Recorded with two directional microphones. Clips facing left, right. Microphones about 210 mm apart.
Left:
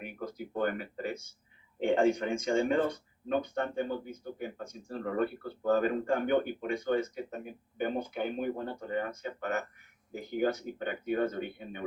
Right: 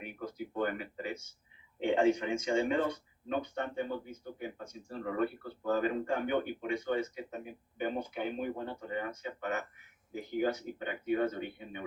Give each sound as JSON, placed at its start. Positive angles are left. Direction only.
{"t": 0.5, "sound": "a man's voice", "side_deg": 45}